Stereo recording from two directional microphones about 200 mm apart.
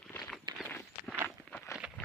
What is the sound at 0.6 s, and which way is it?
Walk, 10° left (ahead or behind).